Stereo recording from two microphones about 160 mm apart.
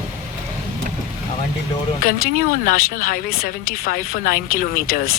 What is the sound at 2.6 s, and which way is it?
Speech, 60° left (ahead or behind).